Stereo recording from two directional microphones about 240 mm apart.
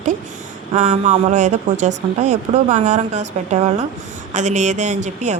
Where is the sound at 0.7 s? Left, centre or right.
Right.